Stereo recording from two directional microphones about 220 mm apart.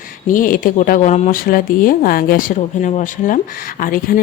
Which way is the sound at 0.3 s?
40° left (ahead or behind).